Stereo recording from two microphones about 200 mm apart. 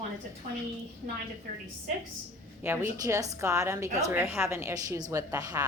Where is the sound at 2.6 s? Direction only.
10° right (ahead or behind).